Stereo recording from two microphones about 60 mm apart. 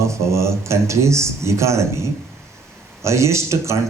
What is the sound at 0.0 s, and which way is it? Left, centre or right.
A man's voice, right.